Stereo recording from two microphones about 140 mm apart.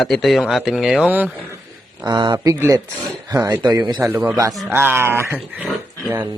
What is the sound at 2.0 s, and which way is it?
Speech, 30° right (ahead or behind).